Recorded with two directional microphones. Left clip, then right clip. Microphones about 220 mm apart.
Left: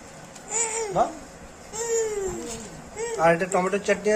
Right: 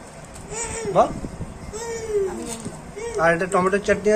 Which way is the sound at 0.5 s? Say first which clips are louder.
Left 2 dB; 50° left (ahead or behind).